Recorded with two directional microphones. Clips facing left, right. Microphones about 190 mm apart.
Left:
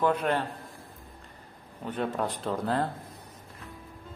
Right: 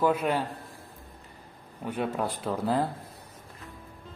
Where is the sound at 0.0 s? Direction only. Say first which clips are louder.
Right 1 dB; 5° right (ahead or behind).